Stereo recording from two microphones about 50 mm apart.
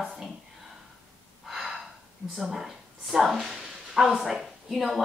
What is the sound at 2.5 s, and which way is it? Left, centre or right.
A woman's voice, centre.